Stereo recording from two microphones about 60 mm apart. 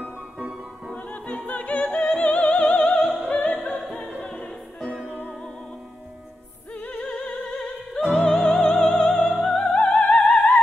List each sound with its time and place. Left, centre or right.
0.0 s music: centre
0.9 s opera: left
3.3 s opera: left
4.3 s music: centre
6.8 s opera: left